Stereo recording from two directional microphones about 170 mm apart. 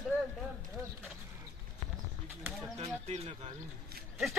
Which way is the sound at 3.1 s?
40° right (ahead or behind).